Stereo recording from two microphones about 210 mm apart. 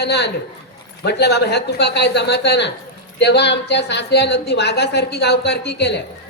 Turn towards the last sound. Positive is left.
turn(degrees=55)  # may be behind; listen again after turning